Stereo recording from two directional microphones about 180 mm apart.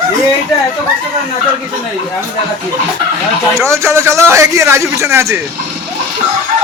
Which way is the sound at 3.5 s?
15° right (ahead or behind).